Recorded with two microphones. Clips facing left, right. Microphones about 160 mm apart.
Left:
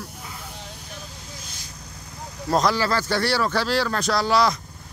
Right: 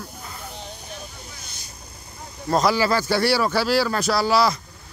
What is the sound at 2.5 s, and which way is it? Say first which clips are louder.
Speech: right 2 dB; 5° right (ahead or behind).